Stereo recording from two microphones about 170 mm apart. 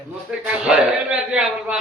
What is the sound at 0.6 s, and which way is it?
A woman's voice, 5° right (ahead or behind).